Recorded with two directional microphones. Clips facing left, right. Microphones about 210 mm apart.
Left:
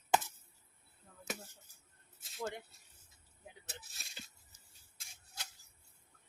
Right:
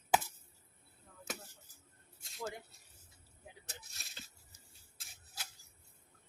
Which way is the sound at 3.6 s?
5° left (ahead or behind).